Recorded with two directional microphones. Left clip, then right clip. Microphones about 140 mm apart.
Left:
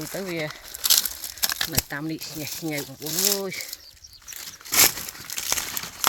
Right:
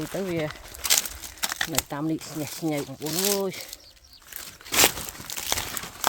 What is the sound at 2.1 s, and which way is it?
Speech, 20° right (ahead or behind).